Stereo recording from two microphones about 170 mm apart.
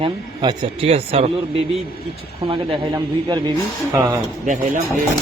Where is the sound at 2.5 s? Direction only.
25° right (ahead or behind).